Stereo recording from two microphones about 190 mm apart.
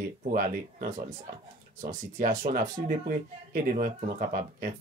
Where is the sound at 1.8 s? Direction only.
45° right (ahead or behind).